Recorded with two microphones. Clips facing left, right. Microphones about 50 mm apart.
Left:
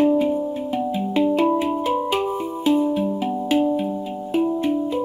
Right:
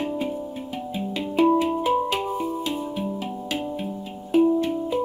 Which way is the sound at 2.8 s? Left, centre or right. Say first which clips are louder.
Left 7 dB; centre.